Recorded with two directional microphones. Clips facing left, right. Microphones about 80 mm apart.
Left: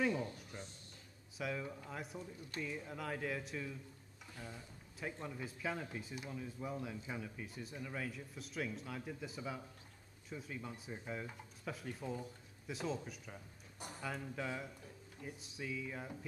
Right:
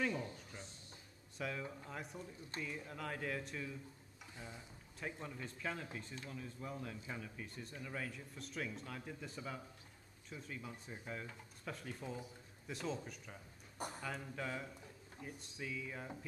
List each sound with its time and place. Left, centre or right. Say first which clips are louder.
0.0 s a sound: left 3 dB; centre
1.4 s speech: left 2 dB; centre
4.4 s speech: left 2 dB; centre
5.0 s speech: left 2 dB; centre